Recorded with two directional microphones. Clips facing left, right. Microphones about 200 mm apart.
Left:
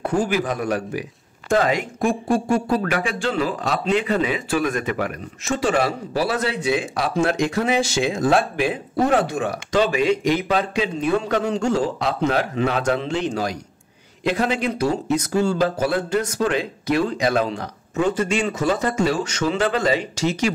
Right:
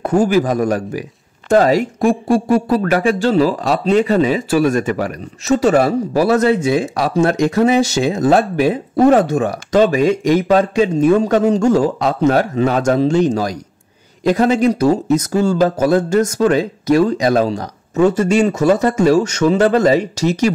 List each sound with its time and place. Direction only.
0.0 s speech: 40° right (ahead or behind)